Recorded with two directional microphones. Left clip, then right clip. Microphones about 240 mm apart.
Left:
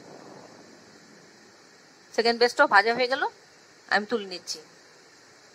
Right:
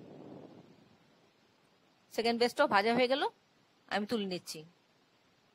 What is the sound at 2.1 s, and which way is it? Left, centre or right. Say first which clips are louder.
Speech: left 9 dB; right.